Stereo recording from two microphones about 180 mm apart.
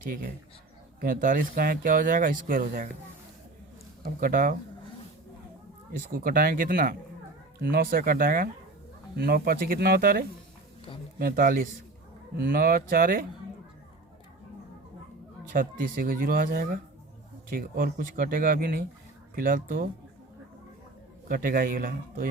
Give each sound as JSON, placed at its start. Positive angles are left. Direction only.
{"t": 1.0, "sound": "speech", "side_deg": -50}
{"t": 4.0, "sound": "speech", "side_deg": -55}
{"t": 5.9, "sound": "speech", "side_deg": -55}
{"t": 15.5, "sound": "speech", "side_deg": -50}
{"t": 21.2, "sound": "speech", "side_deg": -55}